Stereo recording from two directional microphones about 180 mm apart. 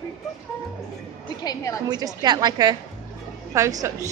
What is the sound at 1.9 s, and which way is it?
A woman's voice, 20° right (ahead or behind).